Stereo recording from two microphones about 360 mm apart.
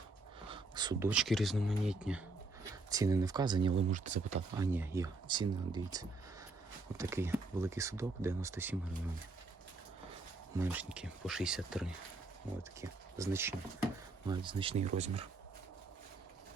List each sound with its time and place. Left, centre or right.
0.5 s speech: centre
10.6 s speech: centre